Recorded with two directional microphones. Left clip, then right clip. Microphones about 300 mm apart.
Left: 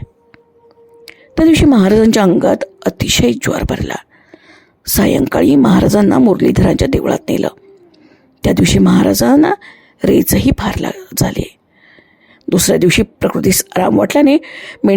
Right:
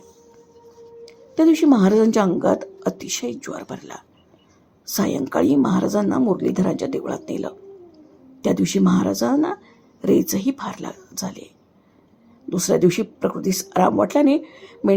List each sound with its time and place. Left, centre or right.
1.0 s speech: left